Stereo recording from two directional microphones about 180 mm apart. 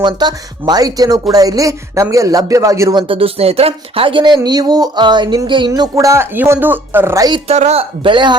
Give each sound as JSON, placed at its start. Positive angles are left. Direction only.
{"t": 0.0, "sound": "speech", "side_deg": -20}
{"t": 3.1, "sound": "speech", "side_deg": -30}